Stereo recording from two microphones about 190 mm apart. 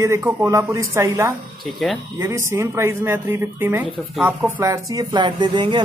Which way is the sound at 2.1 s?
15° right (ahead or behind).